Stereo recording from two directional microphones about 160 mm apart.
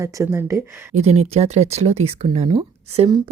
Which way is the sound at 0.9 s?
45° right (ahead or behind).